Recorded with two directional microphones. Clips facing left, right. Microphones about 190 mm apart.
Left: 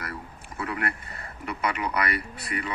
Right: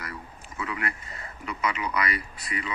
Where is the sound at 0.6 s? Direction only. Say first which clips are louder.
Left 2 dB; 55° left (ahead or behind).